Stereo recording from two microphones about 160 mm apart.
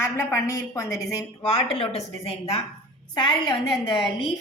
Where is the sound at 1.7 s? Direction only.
35° left (ahead or behind).